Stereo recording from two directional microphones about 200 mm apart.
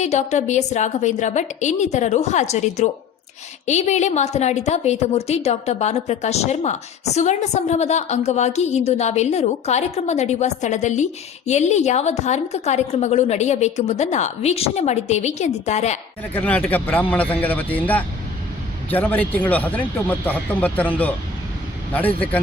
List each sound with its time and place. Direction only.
0.0 s a woman's voice: 35° left (ahead or behind)
16.3 s speech: 10° left (ahead or behind)